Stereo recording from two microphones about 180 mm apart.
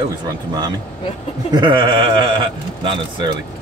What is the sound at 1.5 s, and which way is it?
Speech, 25° right (ahead or behind).